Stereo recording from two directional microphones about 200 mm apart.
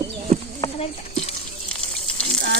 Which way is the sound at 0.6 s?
30° left (ahead or behind).